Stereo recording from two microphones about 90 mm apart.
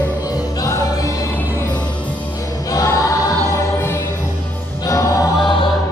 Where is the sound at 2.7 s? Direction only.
40° left (ahead or behind).